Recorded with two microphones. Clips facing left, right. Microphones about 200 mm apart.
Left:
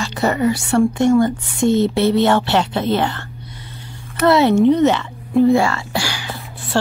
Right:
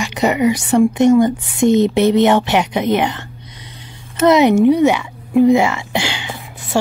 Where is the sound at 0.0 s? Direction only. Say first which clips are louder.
Right 2 dB; 15° right (ahead or behind).